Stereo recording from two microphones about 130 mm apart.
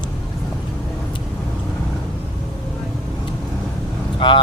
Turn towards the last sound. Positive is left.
turn(degrees=40)  # may be behind; listen again after turning